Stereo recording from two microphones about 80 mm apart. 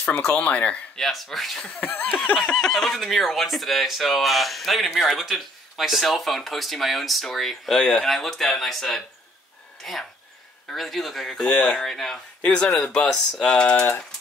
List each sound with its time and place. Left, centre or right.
0.2 s speech: centre
1.0 s speech: centre
1.7 s laughter: centre
2.4 s speech: centre